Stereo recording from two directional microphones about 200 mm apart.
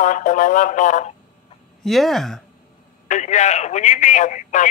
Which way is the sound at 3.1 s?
35° left (ahead or behind).